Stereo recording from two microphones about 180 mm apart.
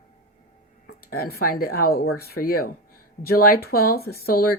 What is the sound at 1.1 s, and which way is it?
Speech, 55° left (ahead or behind).